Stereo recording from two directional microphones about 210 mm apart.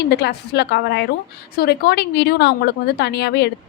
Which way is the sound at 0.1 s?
50° left (ahead or behind).